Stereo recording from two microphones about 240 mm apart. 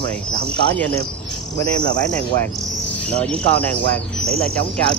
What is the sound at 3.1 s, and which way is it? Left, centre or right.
Speech, centre.